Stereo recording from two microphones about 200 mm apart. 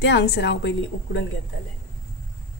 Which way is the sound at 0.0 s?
60° left (ahead or behind).